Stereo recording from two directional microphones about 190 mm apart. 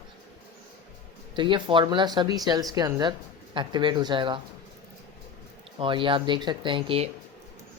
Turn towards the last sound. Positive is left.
turn(degrees=-30)  # may be behind; listen again after turning